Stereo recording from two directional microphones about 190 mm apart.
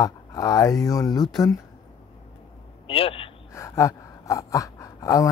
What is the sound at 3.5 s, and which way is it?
Gasp, 15° left (ahead or behind).